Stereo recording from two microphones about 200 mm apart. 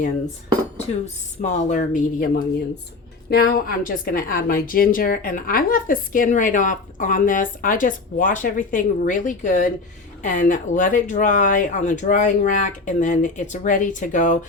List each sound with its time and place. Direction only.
1.0 s speech: 35° left (ahead or behind)
3.2 s a woman's voice: 50° left (ahead or behind)